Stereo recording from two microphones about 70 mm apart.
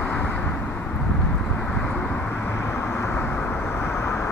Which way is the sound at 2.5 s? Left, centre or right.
Left.